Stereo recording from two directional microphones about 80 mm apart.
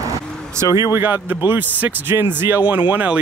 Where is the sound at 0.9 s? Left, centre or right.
Right.